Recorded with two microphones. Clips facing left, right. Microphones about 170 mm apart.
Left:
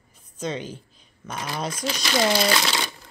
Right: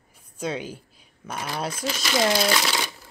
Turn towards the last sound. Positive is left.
turn(degrees=-5)  # may be behind; listen again after turning